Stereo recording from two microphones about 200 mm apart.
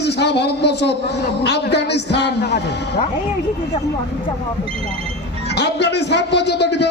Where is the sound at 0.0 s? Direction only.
55° left (ahead or behind).